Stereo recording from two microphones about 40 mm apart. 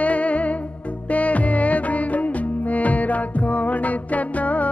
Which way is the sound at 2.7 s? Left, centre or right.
Left.